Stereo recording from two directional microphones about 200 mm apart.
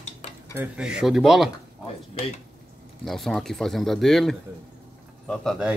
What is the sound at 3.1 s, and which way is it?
Speech, centre (ahead or behind).